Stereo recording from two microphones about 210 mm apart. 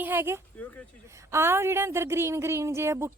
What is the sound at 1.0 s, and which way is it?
A woman's voice, 15° right (ahead or behind).